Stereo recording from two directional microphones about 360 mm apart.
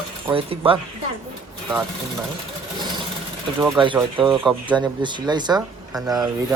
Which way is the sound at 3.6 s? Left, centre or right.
Centre.